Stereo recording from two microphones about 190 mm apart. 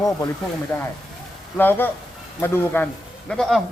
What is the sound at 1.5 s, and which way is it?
Speech, 10° left (ahead or behind).